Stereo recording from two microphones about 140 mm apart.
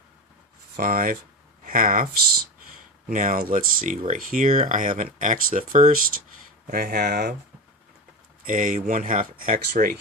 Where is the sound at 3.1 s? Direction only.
70° right (ahead or behind).